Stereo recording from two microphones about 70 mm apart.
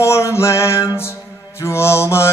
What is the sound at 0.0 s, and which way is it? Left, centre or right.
Music, left.